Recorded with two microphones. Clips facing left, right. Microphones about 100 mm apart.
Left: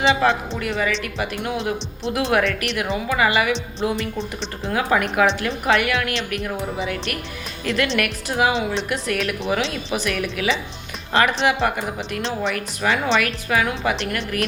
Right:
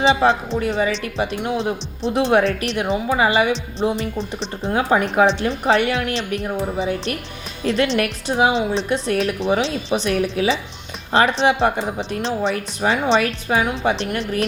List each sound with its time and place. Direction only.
0.0 s a woman's voice: 30° right (ahead or behind)
4.2 s speech: centre (ahead or behind)
4.7 s a woman's voice: 30° right (ahead or behind)